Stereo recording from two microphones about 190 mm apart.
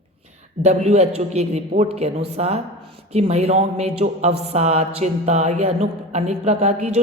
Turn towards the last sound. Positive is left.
turn(degrees=-35)  # may be behind; listen again after turning